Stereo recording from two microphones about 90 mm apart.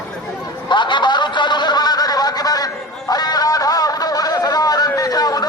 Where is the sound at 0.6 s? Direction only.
60° left (ahead or behind).